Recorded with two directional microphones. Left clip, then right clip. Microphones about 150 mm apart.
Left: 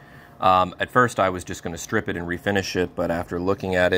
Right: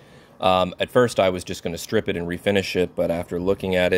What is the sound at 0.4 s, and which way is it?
Speech, 55° right (ahead or behind).